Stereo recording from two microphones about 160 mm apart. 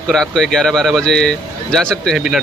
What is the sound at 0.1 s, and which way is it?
Speech, 5° left (ahead or behind).